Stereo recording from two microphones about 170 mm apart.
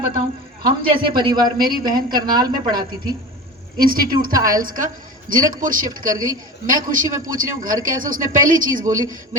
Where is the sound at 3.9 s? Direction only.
60° right (ahead or behind).